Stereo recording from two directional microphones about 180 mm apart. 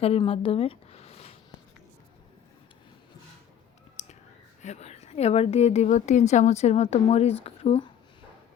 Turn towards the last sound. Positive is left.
turn(degrees=35)  # may be behind; listen again after turning